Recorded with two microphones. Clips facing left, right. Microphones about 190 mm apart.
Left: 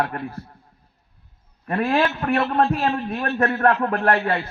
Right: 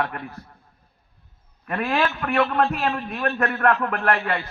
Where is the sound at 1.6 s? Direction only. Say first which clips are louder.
Left 3 dB; 30° left (ahead or behind).